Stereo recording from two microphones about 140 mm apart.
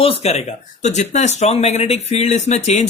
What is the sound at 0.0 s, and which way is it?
Speech, 45° left (ahead or behind).